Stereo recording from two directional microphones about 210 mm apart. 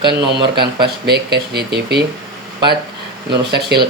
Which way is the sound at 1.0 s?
50° right (ahead or behind).